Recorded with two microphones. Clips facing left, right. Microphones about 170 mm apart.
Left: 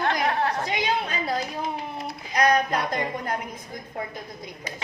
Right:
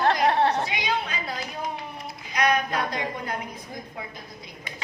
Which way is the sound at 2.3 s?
40° left (ahead or behind).